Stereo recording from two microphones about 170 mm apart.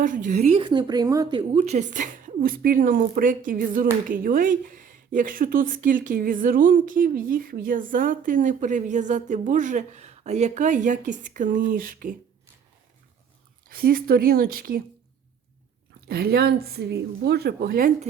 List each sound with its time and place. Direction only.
0.0 s a woman's voice: 50° right (ahead or behind); by 1.5 s 25° right (ahead or behind)
1.6 s speech: 45° right (ahead or behind)
13.7 s speech: 60° right (ahead or behind)
16.0 s speech: 65° right (ahead or behind)